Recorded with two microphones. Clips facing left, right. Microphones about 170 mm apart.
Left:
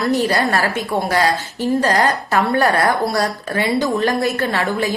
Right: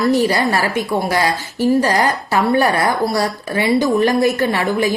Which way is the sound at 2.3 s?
10° right (ahead or behind).